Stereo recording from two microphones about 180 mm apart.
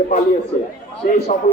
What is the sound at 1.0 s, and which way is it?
Speech, 40° left (ahead or behind).